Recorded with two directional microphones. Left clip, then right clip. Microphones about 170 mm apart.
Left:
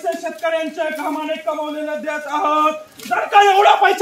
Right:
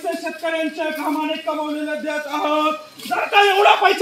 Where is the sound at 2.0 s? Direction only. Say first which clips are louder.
Left 4 dB; 5° left (ahead or behind).